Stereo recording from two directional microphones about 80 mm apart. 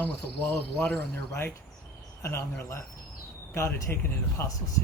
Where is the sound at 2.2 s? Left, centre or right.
Left.